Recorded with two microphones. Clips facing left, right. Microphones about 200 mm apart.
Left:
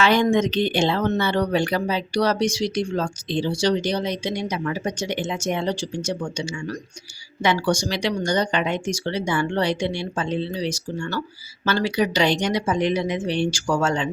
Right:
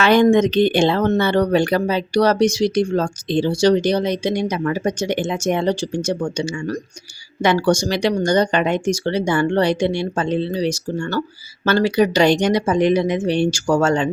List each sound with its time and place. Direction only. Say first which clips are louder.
0.0 s speech: right 5 dB; 50° right (ahead or behind)